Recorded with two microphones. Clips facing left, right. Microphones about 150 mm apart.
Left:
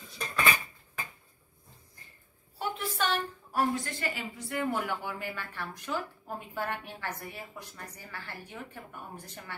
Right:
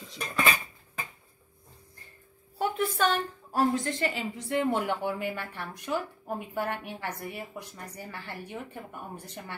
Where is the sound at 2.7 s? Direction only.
50° right (ahead or behind).